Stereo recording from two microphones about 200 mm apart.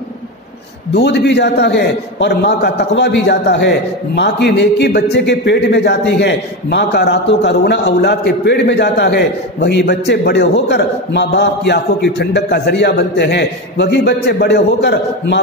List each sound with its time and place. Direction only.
0.9 s a man's voice: 55° left (ahead or behind)